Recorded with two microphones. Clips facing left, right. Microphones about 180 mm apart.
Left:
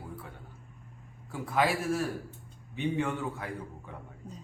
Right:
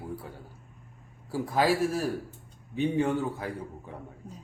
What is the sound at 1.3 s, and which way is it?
Speech, 35° right (ahead or behind).